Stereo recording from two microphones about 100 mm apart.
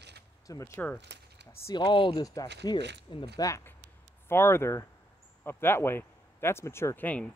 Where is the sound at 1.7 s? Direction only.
55° left (ahead or behind).